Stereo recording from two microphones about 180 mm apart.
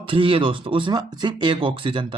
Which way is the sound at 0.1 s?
30° right (ahead or behind).